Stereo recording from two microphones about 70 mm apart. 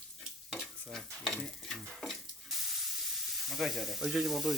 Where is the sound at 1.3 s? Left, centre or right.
Centre.